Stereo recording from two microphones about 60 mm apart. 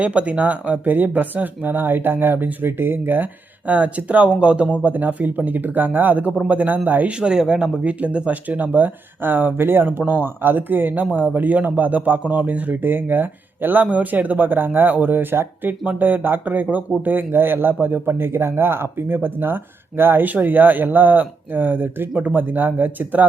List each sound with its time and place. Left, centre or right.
0.0 s speech: right
3.7 s speech: right
7.1 s speech: centre; by 23.2 s right